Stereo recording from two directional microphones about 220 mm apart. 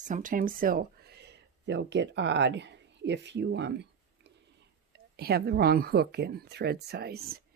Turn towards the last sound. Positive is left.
turn(degrees=-45)  # may be behind; listen again after turning